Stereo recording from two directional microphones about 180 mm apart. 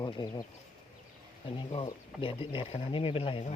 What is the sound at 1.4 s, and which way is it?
Speech, 30° left (ahead or behind).